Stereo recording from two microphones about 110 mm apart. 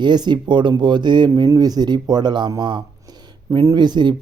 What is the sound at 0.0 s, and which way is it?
Speech, 40° right (ahead or behind).